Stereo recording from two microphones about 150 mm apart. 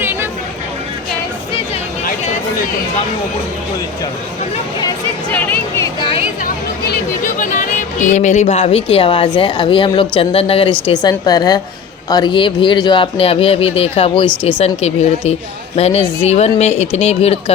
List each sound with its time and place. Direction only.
0.0 s chatter: 15° right (ahead or behind)
5.3 s speech: 15° left (ahead or behind)
6.4 s a sound: 65° left (ahead or behind); by 9.5 s 30° left (ahead or behind)
9.5 s speech: 35° left (ahead or behind)
10.8 s a woman's voice: 25° left (ahead or behind); by 17.3 s 45° left (ahead or behind)